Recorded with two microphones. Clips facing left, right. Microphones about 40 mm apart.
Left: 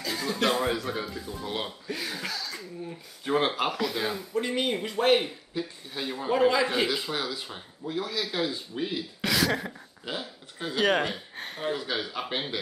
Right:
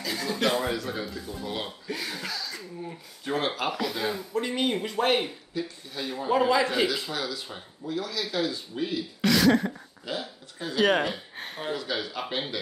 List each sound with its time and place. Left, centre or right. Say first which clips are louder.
0.0 s speech: even; centre
3.3 s speech: left 3 dB; left
3.7 s speech: even; centre
5.5 s speech: right 1 dB; centre
6.1 s speech: even; centre
7.4 s speech: even; centre
7.9 s speech: even; left
8.2 s speech: right 2 dB; centre
10.0 s a sound: right 1 dB; left
10.8 s speech: right 2 dB; centre
11.7 s speech: right 2 dB; centre